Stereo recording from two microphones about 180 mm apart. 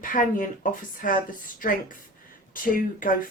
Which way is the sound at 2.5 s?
50° left (ahead or behind).